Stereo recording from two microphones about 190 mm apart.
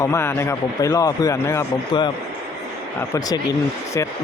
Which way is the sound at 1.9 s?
25° left (ahead or behind).